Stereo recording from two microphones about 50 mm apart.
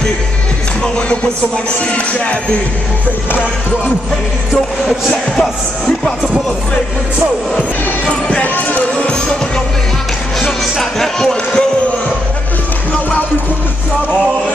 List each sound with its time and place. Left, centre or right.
1.9 s music: left
8.4 s music: left
10.4 s music: centre